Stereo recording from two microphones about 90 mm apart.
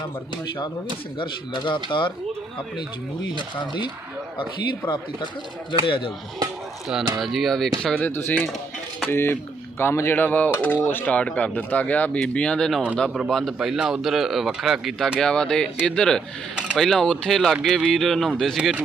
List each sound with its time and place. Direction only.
1.2 s speech: 65° left (ahead or behind)
3.3 s speech: 60° left (ahead or behind)
7.2 s speech: centre (ahead or behind)
8.0 s speech: 20° left (ahead or behind); by 18.8 s 5° right (ahead or behind)